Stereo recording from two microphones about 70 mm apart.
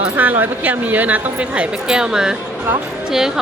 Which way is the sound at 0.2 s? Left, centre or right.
Right.